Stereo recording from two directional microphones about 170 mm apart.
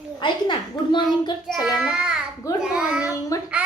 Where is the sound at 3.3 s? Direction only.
20° left (ahead or behind).